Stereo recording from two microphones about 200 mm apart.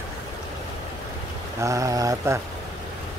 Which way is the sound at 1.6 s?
15° right (ahead or behind).